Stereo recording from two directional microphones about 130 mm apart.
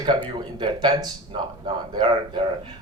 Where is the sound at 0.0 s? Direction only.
35° right (ahead or behind).